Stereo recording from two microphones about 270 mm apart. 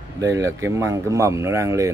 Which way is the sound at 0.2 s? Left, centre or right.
Centre.